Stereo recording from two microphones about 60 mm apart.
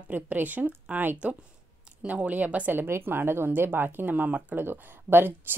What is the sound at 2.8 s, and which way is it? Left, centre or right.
Speech, right.